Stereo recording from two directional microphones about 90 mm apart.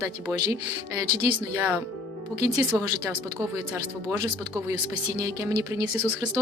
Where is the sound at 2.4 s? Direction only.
35° right (ahead or behind).